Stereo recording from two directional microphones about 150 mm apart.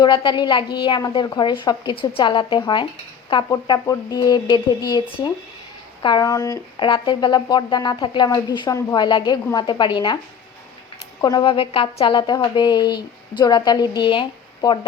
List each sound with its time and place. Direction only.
0.0 s speech: 30° left (ahead or behind)
11.2 s speech: 30° left (ahead or behind)